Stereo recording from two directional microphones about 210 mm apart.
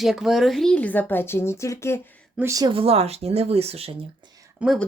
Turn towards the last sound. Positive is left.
turn(degrees=0)  # may be behind; listen again after turning